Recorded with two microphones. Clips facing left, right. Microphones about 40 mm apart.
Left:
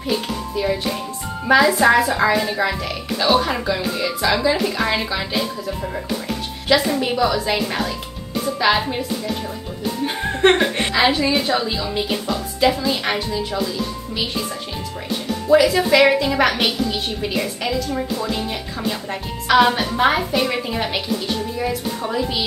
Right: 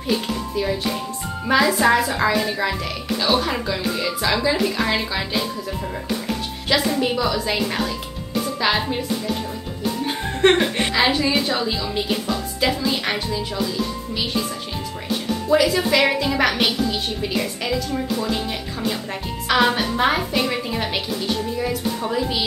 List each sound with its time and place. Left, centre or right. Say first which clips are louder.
0.6 s music: left 2 dB; centre
1.5 s speech: left 3 dB; centre
6.7 s speech: left 2 dB; centre
10.0 s speech: left 2 dB; centre
15.4 s speech: left 4 dB; centre